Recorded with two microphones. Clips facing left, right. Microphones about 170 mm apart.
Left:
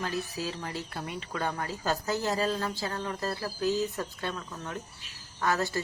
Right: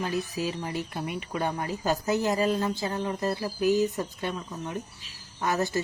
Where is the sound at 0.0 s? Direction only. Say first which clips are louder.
Right 4 dB; 15° right (ahead or behind).